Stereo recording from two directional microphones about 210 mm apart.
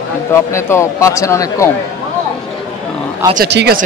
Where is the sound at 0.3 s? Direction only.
15° left (ahead or behind).